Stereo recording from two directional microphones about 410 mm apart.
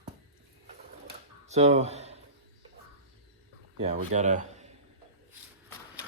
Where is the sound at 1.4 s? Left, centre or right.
Centre.